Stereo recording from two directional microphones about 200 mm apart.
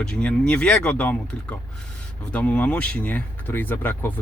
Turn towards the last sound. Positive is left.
turn(degrees=10)  # may be behind; listen again after turning